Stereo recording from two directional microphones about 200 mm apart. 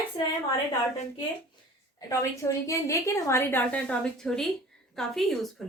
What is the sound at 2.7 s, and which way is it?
A woman's voice, 15° left (ahead or behind).